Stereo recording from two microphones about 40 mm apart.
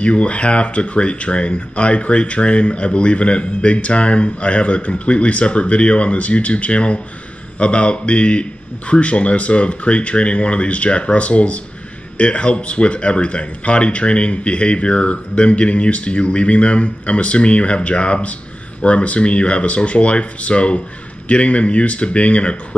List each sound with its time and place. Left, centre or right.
0.0 s speech: left